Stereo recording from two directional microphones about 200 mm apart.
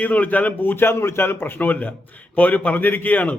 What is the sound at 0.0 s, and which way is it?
A man's voice, 5° left (ahead or behind).